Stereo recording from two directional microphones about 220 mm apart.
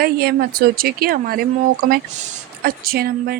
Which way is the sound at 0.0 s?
45° right (ahead or behind).